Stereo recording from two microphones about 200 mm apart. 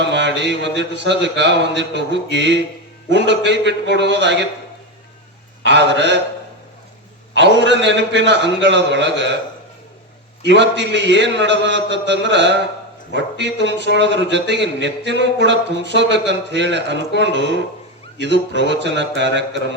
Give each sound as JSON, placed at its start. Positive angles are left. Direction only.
{"t": 0.1, "sound": "a man's voice", "side_deg": -60}
{"t": 5.6, "sound": "a man's voice", "side_deg": -60}
{"t": 7.3, "sound": "a man's voice", "side_deg": -60}
{"t": 10.4, "sound": "a man's voice", "side_deg": -60}